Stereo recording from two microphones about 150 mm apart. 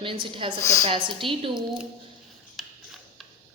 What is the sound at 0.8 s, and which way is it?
Speech, 35° right (ahead or behind).